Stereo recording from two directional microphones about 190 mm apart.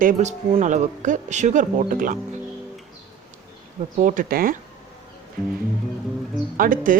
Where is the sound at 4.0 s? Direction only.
45° right (ahead or behind).